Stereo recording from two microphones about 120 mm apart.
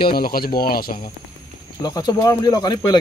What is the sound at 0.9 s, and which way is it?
Speech, 75° left (ahead or behind).